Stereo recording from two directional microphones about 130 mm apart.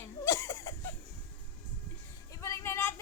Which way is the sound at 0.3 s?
25° left (ahead or behind).